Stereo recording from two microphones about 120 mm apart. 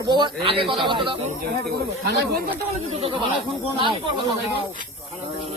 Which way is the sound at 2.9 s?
50° right (ahead or behind).